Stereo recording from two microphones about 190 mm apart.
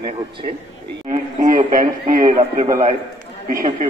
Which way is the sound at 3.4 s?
45° right (ahead or behind).